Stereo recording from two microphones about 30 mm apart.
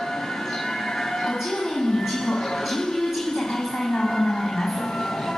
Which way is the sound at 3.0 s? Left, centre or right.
Centre.